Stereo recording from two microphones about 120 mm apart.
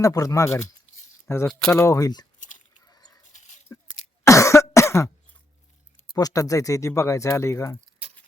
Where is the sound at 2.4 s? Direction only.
90° left.